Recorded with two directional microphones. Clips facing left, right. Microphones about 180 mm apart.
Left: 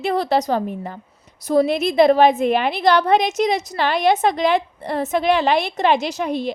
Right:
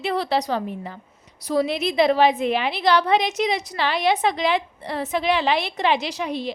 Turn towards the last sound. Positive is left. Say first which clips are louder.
# left 4 dB
turn(degrees=50)  # may be behind; listen again after turning